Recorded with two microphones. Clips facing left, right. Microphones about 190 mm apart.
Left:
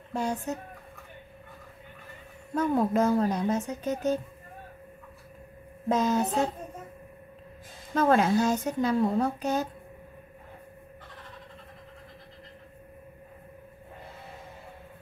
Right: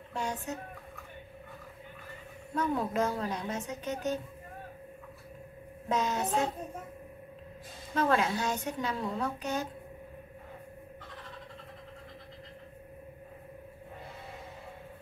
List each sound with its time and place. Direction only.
0.1 s a woman's voice: 40° left (ahead or behind)
2.7 s a woman's voice: 40° left (ahead or behind)
5.9 s a woman's voice: 40° left (ahead or behind)
7.9 s a woman's voice: 40° left (ahead or behind)